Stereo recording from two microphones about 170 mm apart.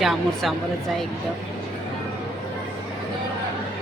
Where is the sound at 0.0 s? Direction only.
Centre (ahead or behind).